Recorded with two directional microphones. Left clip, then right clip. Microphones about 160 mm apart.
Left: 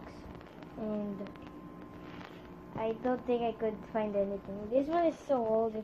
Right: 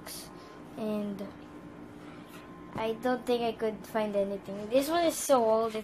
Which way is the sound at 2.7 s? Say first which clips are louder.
Right 2 dB; 10° right (ahead or behind).